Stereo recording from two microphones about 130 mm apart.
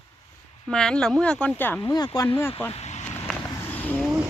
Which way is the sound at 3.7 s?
15° left (ahead or behind).